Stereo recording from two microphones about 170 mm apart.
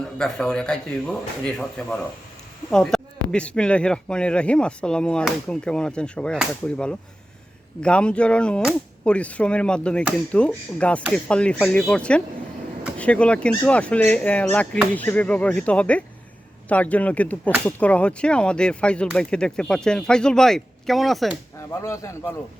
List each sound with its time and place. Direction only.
0.2 s speech: 5° left (ahead or behind)
21.7 s speech: 15° left (ahead or behind)